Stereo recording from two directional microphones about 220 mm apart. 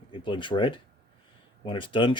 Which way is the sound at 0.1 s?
20° left (ahead or behind).